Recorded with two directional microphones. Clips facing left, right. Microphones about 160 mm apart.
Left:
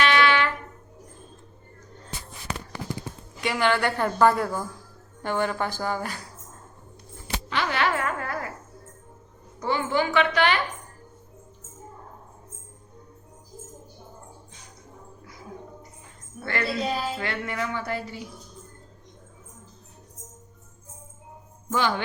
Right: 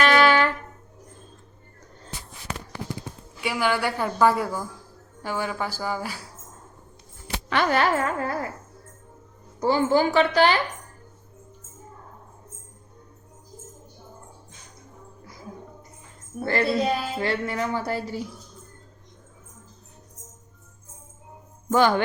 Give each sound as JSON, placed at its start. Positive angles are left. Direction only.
{"t": 0.0, "sound": "music", "side_deg": -40}
{"t": 3.4, "sound": "a woman's voice", "side_deg": -10}
{"t": 7.5, "sound": "music", "side_deg": -45}
{"t": 9.6, "sound": "a woman's voice", "side_deg": -35}
{"t": 16.4, "sound": "a woman's voice", "side_deg": -35}
{"t": 21.7, "sound": "speech", "side_deg": -50}